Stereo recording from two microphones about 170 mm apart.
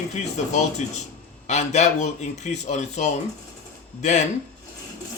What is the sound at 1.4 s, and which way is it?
A man's voice, 40° left (ahead or behind).